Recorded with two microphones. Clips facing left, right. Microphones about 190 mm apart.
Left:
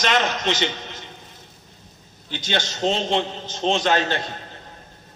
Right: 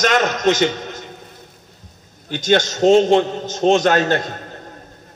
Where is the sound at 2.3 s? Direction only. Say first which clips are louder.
Right 10 dB; 45° right (ahead or behind).